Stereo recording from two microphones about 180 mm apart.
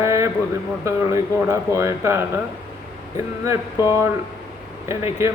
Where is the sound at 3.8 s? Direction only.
15° right (ahead or behind).